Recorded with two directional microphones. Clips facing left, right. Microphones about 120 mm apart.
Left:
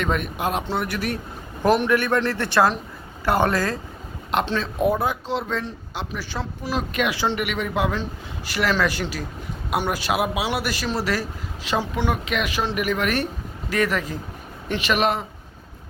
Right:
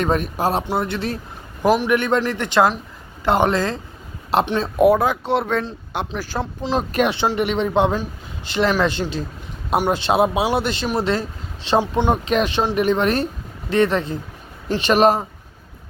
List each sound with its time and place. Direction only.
0.0 s speech: 35° right (ahead or behind)
1.6 s a man's voice: centre (ahead or behind)
1.9 s speech: 20° right (ahead or behind)
4.3 s speech: 35° right (ahead or behind)
4.8 s speech: 85° right; by 6.1 s 60° right (ahead or behind)
6.4 s speech: 20° right (ahead or behind)
6.7 s speech: 35° right (ahead or behind); by 12.1 s 20° right (ahead or behind)
12.1 s speech: 35° right (ahead or behind)